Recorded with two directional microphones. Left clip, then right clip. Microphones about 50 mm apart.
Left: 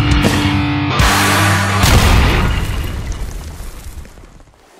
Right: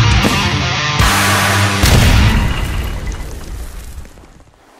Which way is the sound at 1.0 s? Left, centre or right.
Centre.